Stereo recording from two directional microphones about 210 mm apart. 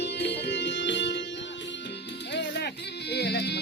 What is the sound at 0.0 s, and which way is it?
Music, 55° left (ahead or behind).